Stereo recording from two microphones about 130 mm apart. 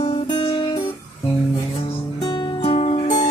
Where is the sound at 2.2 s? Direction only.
40° left (ahead or behind).